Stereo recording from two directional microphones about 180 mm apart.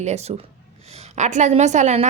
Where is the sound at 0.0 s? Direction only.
35° right (ahead or behind).